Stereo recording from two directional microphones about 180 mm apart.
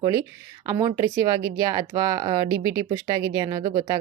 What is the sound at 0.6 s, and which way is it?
Speech, 20° right (ahead or behind).